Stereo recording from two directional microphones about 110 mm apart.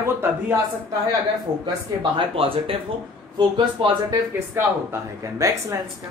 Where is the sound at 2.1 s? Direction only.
55° right (ahead or behind).